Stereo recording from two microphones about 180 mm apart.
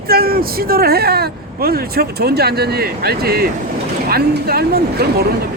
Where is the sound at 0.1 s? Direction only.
55° right (ahead or behind).